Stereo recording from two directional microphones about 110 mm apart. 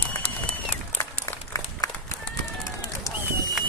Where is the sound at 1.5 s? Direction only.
30° left (ahead or behind).